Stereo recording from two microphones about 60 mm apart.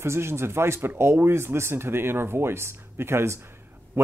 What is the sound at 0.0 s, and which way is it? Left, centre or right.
Speech, right.